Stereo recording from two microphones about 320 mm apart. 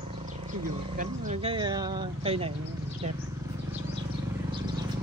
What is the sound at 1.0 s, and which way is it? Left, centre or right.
Speech, centre.